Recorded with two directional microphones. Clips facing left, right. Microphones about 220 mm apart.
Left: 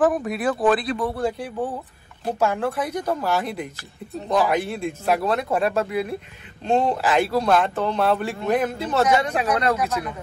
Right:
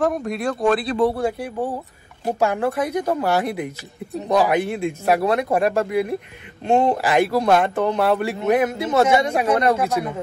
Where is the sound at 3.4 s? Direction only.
10° right (ahead or behind).